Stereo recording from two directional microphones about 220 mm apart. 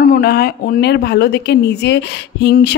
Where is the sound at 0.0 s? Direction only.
40° left (ahead or behind).